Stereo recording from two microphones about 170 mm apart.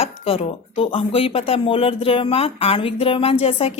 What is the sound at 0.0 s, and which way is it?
Speech, 35° left (ahead or behind).